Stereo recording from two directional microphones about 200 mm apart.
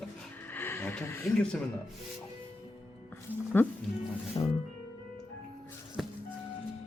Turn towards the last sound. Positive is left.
turn(degrees=0)  # may be behind; listen again after turning